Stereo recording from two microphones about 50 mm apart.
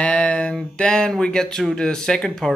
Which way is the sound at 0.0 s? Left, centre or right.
Left.